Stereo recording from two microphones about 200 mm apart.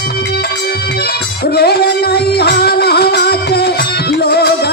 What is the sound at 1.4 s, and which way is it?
Music, 50° left (ahead or behind).